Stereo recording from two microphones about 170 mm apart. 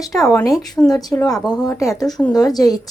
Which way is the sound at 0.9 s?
20° left (ahead or behind).